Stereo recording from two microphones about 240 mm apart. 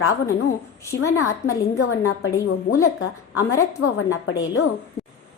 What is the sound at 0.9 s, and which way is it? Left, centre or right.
A woman's voice, left.